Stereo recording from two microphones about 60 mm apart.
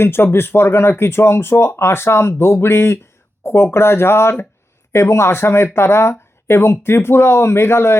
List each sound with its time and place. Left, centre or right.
0.0 s speech: left